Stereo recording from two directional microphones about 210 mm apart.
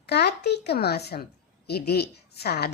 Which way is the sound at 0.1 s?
50° left (ahead or behind).